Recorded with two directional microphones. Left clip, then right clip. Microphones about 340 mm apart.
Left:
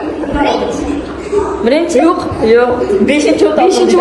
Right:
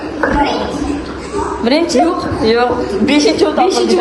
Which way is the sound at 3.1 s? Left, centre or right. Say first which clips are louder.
Right 1 dB; centre.